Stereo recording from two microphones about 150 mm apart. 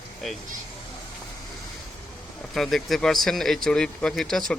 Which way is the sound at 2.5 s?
Centre (ahead or behind).